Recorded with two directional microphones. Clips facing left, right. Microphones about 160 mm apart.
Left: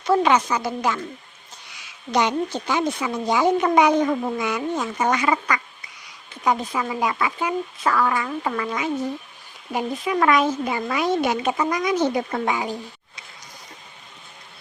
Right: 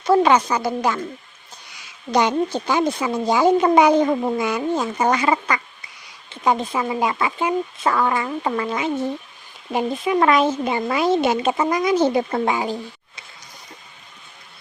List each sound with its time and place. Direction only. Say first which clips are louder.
0.0 s speech: right 3 dB; 35° right (ahead or behind)
2.1 s speech: right 3 dB; 35° right (ahead or behind)